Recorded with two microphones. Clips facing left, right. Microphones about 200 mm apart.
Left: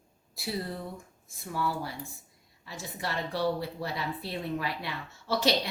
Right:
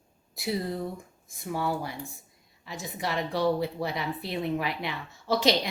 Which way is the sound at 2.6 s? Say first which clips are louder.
Right 3 dB; 15° right (ahead or behind).